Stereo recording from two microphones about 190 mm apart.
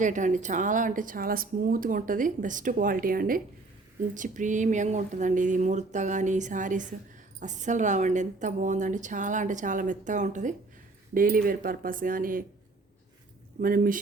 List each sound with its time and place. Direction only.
0.0 s a woman's voice: 40° right (ahead or behind)
13.6 s speech: 50° right (ahead or behind)